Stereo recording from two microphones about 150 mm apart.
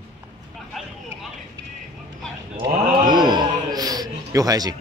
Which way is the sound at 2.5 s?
30° right (ahead or behind).